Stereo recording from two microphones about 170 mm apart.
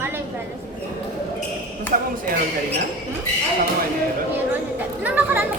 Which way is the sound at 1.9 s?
55° right (ahead or behind).